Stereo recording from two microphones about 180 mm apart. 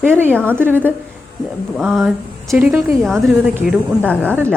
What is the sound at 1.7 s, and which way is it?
A woman's voice, centre (ahead or behind).